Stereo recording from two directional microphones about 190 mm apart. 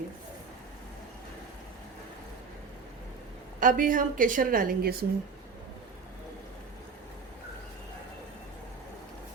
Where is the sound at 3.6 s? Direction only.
45° right (ahead or behind).